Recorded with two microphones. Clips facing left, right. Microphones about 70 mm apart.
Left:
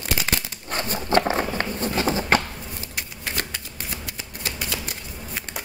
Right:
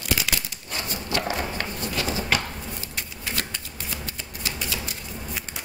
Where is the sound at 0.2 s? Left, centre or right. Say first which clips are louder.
Left 2 dB; left.